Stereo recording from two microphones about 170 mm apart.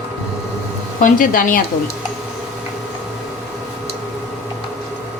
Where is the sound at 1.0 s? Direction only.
50° left (ahead or behind).